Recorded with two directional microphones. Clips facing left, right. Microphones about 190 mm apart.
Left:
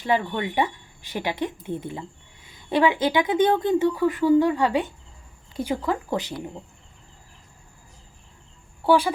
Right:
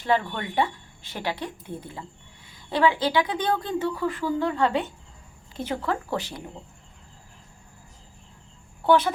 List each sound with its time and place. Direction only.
0.1 s a woman's voice: 10° left (ahead or behind)
8.9 s a woman's voice: 10° left (ahead or behind)